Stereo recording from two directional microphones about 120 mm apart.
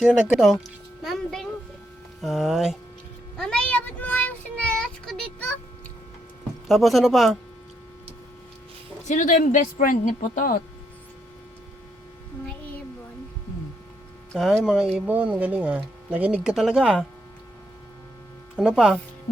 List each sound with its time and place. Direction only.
0.0 s speech: 5° right (ahead or behind)
3.3 s child singing: 10° left (ahead or behind)
6.7 s speech: centre (ahead or behind)
9.0 s a woman's voice: 90° left
14.3 s speech: 5° right (ahead or behind)
18.5 s speech: 5° right (ahead or behind)